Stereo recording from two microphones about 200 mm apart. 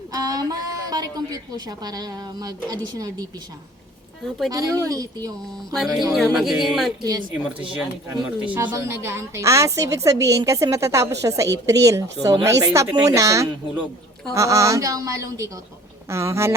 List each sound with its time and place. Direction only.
0.1 s a woman's voice: 20° right (ahead or behind)
4.5 s speech: 15° right (ahead or behind)
6.1 s speech: centre (ahead or behind)